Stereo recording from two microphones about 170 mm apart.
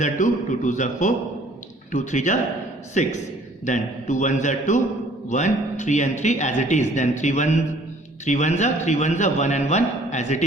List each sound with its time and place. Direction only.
0.0 s speech: 45° left (ahead or behind)